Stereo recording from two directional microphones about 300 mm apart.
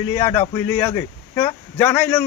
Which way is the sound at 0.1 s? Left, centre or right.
Centre.